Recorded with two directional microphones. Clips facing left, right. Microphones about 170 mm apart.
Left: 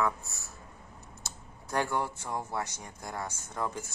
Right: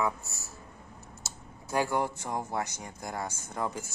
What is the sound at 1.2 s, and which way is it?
Speech, 5° right (ahead or behind).